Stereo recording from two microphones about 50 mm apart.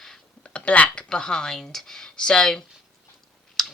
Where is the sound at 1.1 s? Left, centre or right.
Centre.